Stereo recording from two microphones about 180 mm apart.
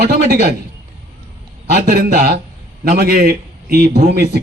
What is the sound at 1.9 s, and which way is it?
A man's voice, 55° right (ahead or behind).